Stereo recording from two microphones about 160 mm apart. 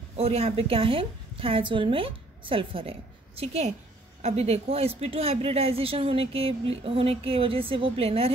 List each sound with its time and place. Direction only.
0.2 s a woman's voice: 40° right (ahead or behind)